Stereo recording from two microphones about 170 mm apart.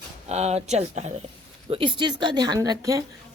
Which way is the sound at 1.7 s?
30° right (ahead or behind).